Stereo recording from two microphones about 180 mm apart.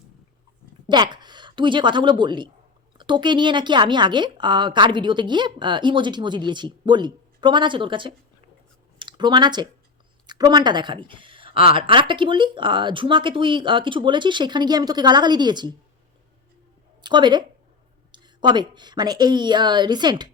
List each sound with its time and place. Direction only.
0.9 s a woman's voice: 25° right (ahead or behind)
17.0 s a woman's voice: 25° right (ahead or behind)